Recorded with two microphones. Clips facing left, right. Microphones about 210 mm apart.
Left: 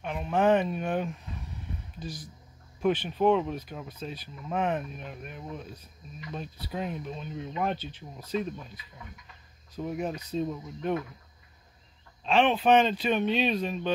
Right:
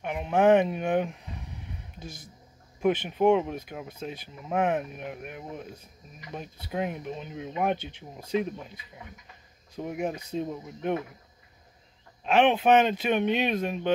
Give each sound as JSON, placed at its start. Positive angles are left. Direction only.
{"t": 0.0, "sound": "speech", "side_deg": -15}
{"t": 2.8, "sound": "speech", "side_deg": -10}
{"t": 12.3, "sound": "speech", "side_deg": -10}